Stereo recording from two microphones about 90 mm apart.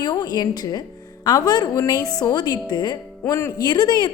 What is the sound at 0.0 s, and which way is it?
A woman's voice, 50° left (ahead or behind).